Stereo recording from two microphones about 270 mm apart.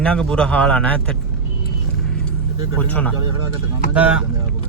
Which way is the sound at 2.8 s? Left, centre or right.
Centre.